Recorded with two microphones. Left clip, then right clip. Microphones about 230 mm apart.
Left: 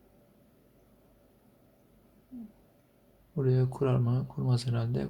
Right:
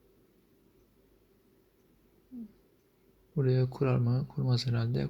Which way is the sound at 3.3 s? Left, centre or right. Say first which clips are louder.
Left 1 dB; right.